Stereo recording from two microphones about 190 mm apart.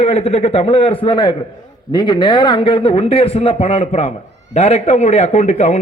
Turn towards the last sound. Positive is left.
turn(degrees=35)  # may be behind; listen again after turning